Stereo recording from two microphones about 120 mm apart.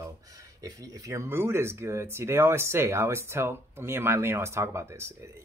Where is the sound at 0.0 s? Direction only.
30° right (ahead or behind).